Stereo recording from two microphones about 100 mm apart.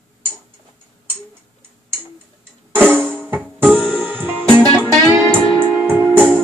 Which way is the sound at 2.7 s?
15° right (ahead or behind).